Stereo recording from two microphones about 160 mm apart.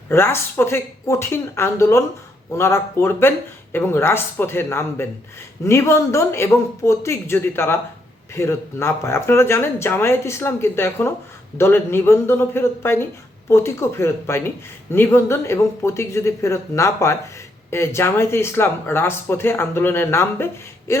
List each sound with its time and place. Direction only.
0.1 s speech: 15° left (ahead or behind)